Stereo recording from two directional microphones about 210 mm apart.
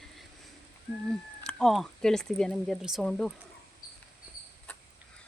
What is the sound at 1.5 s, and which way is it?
Speech, 5° left (ahead or behind).